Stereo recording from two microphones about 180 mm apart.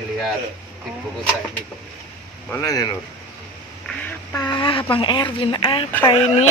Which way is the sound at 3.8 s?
10° left (ahead or behind).